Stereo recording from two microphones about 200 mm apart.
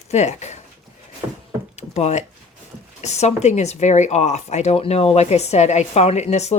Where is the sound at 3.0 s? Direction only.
35° left (ahead or behind).